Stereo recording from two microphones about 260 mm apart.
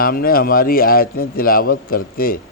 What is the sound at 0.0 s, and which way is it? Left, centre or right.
Speech, left.